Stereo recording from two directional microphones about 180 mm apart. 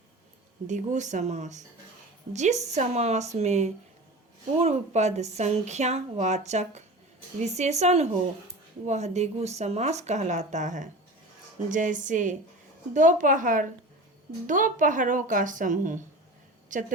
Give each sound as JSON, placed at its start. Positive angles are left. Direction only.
{"t": 0.7, "sound": "speech", "side_deg": -40}